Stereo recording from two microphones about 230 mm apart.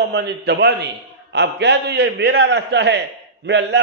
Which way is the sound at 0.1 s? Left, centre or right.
Right.